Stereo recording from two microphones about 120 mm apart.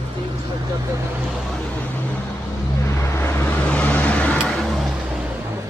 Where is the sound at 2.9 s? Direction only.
20° left (ahead or behind).